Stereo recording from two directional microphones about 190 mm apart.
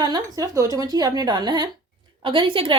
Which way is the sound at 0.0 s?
20° right (ahead or behind).